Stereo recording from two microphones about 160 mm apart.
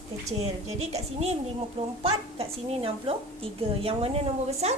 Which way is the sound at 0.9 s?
40° right (ahead or behind).